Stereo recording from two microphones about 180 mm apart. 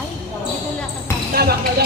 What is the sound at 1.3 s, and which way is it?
Music, 60° right (ahead or behind).